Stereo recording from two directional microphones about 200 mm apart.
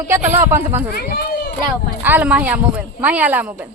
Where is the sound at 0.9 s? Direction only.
50° left (ahead or behind).